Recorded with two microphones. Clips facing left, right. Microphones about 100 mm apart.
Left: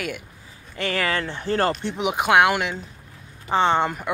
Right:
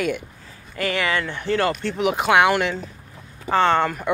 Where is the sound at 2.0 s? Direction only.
15° left (ahead or behind).